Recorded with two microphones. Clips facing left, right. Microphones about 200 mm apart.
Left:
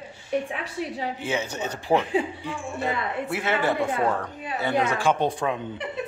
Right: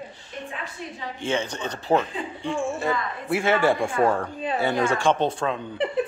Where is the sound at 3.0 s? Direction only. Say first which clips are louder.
Left 3 dB; 70° left (ahead or behind).